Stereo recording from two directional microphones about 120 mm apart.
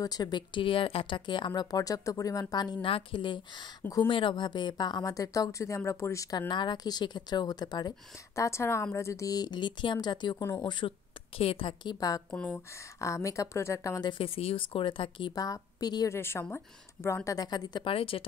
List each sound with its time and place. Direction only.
0.0 s speech: 35° left (ahead or behind)
6.3 s speech: 40° left (ahead or behind)
8.4 s speech: 25° left (ahead or behind)
12.3 s speech: 10° left (ahead or behind)
13.0 s speech: 25° left (ahead or behind)
14.0 s speech: 50° left (ahead or behind)
15.3 s speech: 30° left (ahead or behind)
16.1 s speech: 20° left (ahead or behind)
17.9 s speech: 50° left (ahead or behind)